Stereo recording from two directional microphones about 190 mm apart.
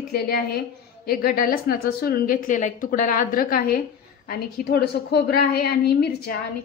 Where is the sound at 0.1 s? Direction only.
55° left (ahead or behind).